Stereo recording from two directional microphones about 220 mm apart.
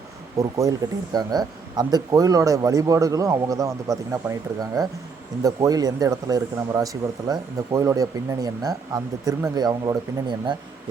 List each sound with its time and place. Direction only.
0.4 s a man's voice: 15° right (ahead or behind)